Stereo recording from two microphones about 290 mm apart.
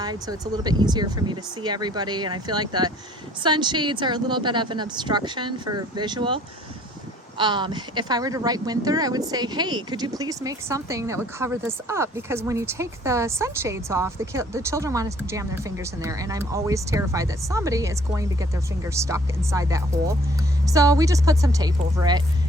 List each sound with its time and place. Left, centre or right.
0.0 s speech: centre
7.3 s speech: centre